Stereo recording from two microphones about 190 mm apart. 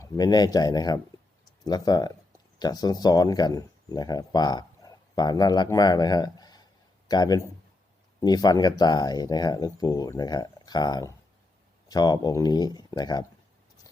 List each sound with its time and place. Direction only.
0.0 s speech: 20° left (ahead or behind)